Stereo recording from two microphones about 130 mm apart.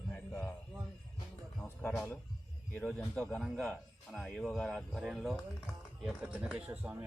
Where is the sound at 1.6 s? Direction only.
15° left (ahead or behind).